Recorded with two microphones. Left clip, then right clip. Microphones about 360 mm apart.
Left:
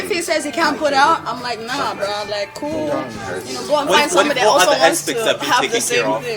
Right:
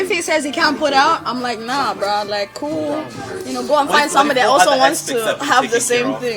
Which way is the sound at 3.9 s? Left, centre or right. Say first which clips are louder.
Left 1 dB; right.